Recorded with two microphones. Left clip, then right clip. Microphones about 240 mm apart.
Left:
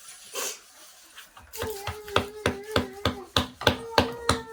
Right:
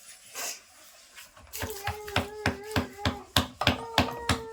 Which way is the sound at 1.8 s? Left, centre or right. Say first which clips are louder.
Left 3 dB; centre.